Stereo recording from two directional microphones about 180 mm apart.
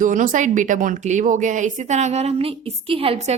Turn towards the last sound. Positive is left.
turn(degrees=-35)  # may be behind; listen again after turning